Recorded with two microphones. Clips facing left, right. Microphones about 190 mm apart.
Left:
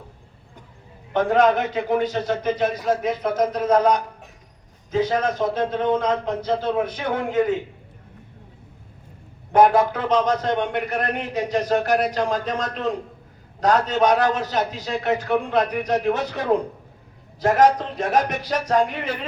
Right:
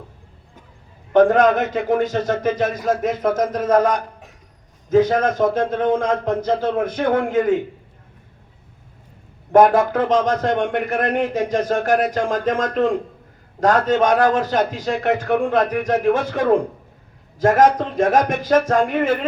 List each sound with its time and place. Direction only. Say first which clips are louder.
1.1 s a man's voice: right 4 dB; 50° right (ahead or behind)
9.5 s a man's voice: right 3 dB; 50° right (ahead or behind)